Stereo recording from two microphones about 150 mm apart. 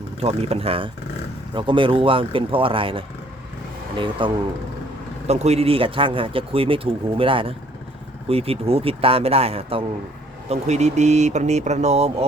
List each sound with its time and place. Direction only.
0.2 s speech: 45° right (ahead or behind)
5.3 s speech: 45° right (ahead or behind)